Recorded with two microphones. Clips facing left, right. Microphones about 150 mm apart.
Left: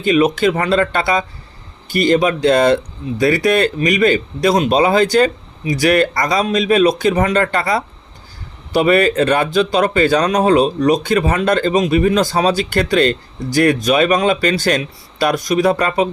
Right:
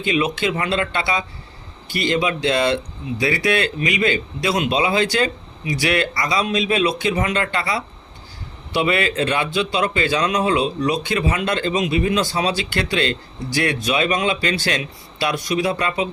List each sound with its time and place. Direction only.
0.0 s speech: 45° left (ahead or behind)